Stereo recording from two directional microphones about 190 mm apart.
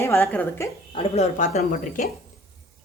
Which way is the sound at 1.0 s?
35° left (ahead or behind).